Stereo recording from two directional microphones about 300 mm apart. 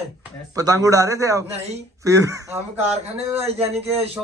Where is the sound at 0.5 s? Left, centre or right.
Centre.